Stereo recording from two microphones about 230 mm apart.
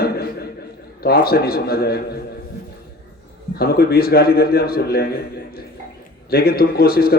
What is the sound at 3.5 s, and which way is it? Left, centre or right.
A man's voice, left.